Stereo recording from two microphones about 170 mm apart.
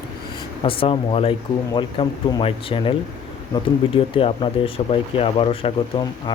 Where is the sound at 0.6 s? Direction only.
30° left (ahead or behind).